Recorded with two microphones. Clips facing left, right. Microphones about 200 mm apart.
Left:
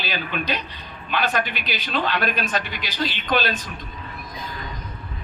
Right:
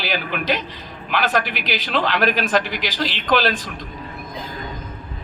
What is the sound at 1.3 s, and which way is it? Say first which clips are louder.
A man's voice: right 4 dB; 90° right.